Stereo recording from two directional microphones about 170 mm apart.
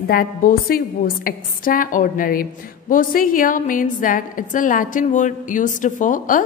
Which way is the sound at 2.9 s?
55° left (ahead or behind).